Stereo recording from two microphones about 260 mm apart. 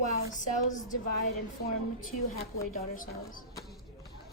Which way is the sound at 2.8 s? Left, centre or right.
Left.